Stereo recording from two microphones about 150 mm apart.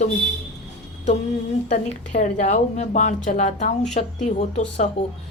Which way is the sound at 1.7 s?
50° left (ahead or behind).